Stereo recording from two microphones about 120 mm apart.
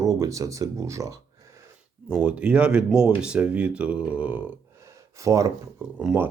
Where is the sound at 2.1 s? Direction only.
10° right (ahead or behind).